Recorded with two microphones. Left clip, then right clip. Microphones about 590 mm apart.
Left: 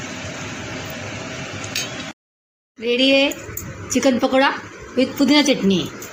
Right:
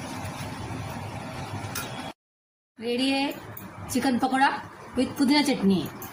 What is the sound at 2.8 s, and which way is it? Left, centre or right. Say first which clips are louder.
Speech: left 11 dB; right.